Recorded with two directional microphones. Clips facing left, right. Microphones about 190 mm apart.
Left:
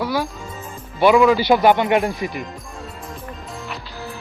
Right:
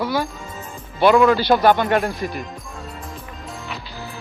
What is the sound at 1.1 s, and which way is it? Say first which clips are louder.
Speech: left 1 dB; centre (ahead or behind).